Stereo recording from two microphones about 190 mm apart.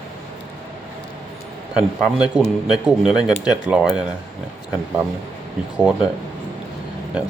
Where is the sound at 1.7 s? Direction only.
5° right (ahead or behind).